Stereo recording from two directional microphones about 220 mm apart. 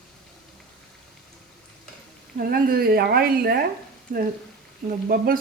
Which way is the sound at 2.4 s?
45° right (ahead or behind).